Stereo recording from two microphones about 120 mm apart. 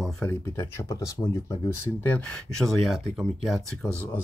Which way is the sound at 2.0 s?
10° left (ahead or behind).